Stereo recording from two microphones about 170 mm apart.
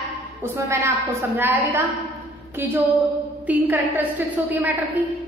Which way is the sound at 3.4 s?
10° right (ahead or behind).